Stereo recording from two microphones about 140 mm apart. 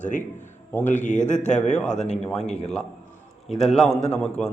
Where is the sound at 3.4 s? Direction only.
5° left (ahead or behind).